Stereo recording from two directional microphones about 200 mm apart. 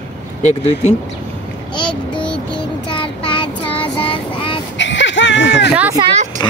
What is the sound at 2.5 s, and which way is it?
Child singing, 25° left (ahead or behind).